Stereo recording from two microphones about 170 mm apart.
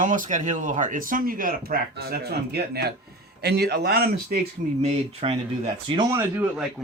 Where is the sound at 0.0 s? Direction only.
50° right (ahead or behind); by 4.1 s 70° right (ahead or behind).